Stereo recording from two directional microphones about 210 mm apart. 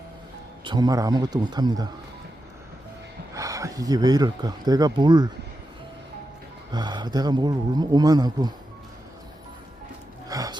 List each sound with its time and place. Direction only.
0.6 s speech: 20° right (ahead or behind)
3.3 s speech: 15° right (ahead or behind)
6.7 s speech: 20° right (ahead or behind)
10.2 s music: 15° right (ahead or behind)